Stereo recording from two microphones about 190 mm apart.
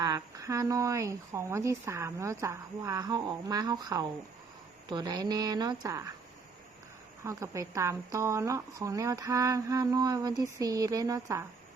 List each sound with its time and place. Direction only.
0.0 s a woman's voice: 20° right (ahead or behind)
7.3 s a woman's voice: 15° right (ahead or behind)